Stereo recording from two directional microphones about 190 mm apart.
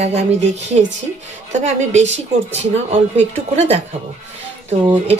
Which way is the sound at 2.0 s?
75° right (ahead or behind).